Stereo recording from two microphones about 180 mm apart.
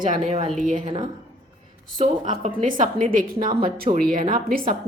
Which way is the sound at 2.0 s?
40° right (ahead or behind).